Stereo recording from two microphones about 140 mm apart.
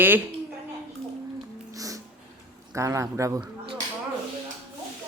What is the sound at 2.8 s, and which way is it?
Speech, 20° right (ahead or behind).